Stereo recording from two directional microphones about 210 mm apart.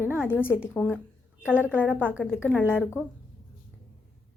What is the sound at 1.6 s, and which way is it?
Speech, 10° right (ahead or behind).